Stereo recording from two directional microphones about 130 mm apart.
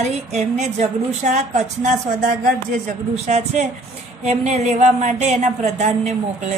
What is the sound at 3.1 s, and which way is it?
A woman's voice, 60° right (ahead or behind).